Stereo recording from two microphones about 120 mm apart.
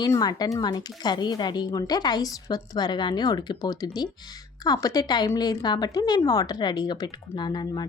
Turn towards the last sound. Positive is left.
turn(degrees=40)  # may be behind; listen again after turning